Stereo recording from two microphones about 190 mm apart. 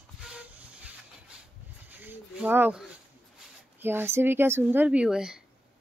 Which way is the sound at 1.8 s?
10° right (ahead or behind).